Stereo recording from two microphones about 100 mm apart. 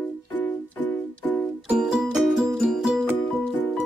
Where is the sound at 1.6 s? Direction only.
5° right (ahead or behind).